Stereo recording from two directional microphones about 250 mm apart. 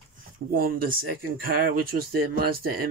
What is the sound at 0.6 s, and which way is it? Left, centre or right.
Speech, right.